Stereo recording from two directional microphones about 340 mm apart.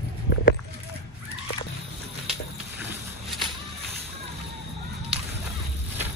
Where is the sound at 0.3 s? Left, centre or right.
Left.